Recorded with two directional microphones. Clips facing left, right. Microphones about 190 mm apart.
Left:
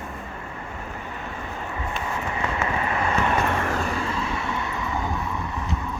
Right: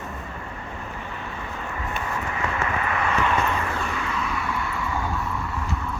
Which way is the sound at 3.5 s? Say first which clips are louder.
Left 2 dB; 45° left (ahead or behind).